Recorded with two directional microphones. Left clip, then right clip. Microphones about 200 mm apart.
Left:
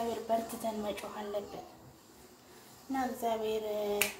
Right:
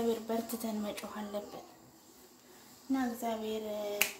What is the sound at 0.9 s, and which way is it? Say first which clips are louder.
Speech: left 2 dB; 50° right (ahead or behind).